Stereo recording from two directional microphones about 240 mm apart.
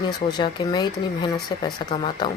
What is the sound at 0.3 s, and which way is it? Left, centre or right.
Speech, centre.